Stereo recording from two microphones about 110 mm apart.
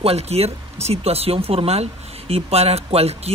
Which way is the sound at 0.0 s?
70° right (ahead or behind).